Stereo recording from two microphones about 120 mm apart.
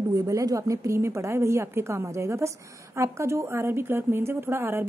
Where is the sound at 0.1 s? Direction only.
25° right (ahead or behind).